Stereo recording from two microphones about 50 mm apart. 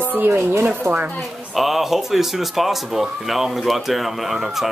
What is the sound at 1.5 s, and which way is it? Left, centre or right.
Speech, centre.